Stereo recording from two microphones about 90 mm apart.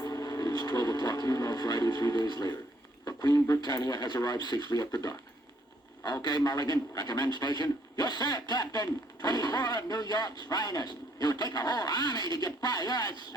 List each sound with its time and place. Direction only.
0.0 s speech: 45° left (ahead or behind)
3.0 s a sound: 45° left (ahead or behind)
3.6 s a man's voice: 45° left (ahead or behind)